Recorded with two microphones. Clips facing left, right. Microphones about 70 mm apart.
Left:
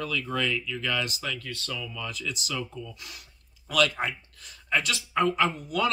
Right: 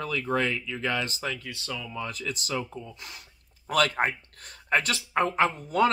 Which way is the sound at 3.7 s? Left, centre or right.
Right.